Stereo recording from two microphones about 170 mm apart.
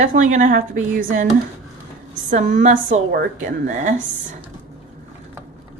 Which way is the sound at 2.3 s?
45° right (ahead or behind).